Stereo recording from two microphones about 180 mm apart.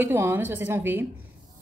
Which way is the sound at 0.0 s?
15° right (ahead or behind).